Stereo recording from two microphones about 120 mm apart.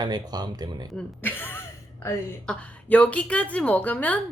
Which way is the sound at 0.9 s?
15° left (ahead or behind).